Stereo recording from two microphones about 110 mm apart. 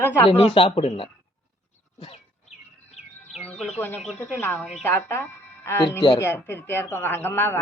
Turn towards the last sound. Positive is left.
turn(degrees=20)  # may be behind; listen again after turning